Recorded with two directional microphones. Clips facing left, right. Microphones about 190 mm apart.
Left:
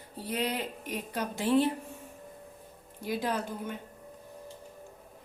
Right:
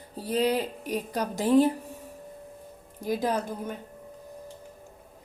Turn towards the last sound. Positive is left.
turn(degrees=-40)  # may be behind; listen again after turning